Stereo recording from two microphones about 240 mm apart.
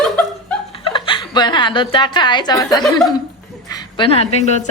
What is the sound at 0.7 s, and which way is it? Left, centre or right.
Speech, left.